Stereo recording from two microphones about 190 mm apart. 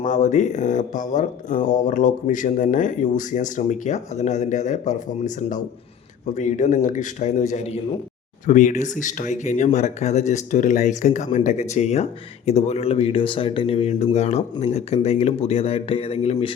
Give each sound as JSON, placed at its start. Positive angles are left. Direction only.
{"t": 0.0, "sound": "speech", "side_deg": 40}